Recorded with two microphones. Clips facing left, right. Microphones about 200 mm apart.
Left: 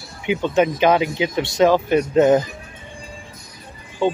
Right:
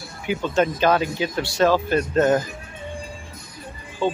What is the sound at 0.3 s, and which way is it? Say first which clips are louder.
Speech: left 3 dB; 20° left (ahead or behind).